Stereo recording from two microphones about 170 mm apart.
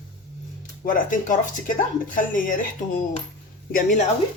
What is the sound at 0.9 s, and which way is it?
Speech, 55° left (ahead or behind).